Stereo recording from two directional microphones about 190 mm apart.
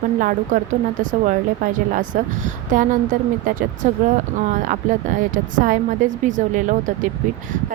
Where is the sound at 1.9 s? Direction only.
40° right (ahead or behind).